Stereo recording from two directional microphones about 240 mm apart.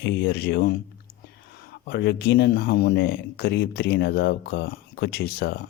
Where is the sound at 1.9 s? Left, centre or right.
Left.